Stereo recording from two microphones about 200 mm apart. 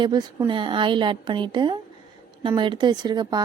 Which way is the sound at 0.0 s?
20° right (ahead or behind).